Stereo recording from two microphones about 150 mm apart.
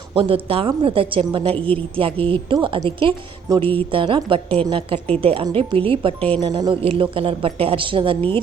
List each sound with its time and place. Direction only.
0.1 s a woman's voice: 35° right (ahead or behind)